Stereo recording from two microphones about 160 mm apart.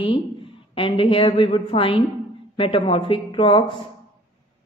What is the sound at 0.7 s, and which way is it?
Speech, 35° left (ahead or behind).